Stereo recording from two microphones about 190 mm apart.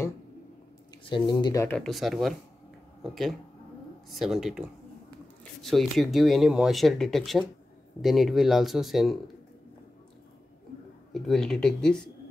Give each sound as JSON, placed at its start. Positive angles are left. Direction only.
{"t": 1.0, "sound": "speech", "side_deg": 25}
{"t": 1.8, "sound": "speech", "side_deg": 0}
{"t": 11.1, "sound": "speech", "side_deg": 0}